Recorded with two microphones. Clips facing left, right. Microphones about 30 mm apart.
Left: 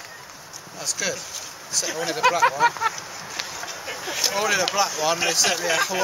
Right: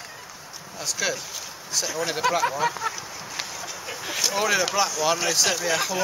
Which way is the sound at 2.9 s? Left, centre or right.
Centre.